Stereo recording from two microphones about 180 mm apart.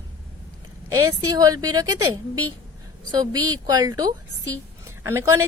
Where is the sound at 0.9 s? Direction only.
20° right (ahead or behind).